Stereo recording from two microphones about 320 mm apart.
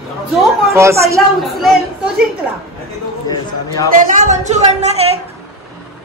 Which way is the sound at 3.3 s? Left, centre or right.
Centre.